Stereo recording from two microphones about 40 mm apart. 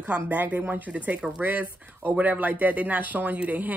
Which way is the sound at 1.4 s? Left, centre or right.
Right.